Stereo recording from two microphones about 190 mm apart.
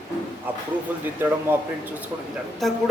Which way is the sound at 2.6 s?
Centre (ahead or behind).